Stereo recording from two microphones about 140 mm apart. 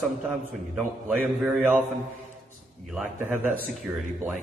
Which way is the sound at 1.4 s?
Centre (ahead or behind).